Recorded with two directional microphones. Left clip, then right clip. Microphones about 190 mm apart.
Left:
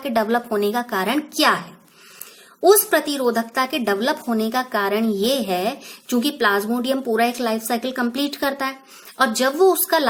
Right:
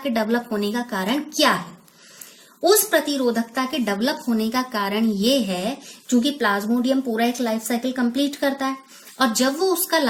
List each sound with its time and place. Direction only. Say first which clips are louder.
0.0 s a woman's voice: left 3 dB; 30° left (ahead or behind)
2.6 s a woman's voice: left 2 dB; 35° left (ahead or behind)